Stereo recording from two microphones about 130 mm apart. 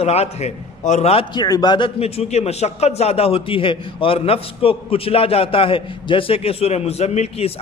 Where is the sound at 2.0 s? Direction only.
50° left (ahead or behind).